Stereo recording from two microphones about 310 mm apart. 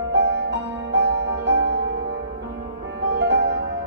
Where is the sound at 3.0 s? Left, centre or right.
Right.